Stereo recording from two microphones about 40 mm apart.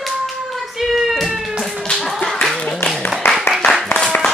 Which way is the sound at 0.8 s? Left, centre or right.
Centre.